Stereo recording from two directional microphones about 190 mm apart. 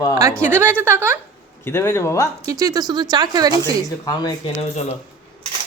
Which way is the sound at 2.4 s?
20° right (ahead or behind).